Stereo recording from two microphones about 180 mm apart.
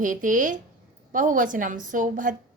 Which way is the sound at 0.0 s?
45° right (ahead or behind).